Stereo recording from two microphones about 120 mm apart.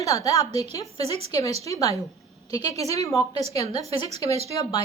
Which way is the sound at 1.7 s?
30° left (ahead or behind).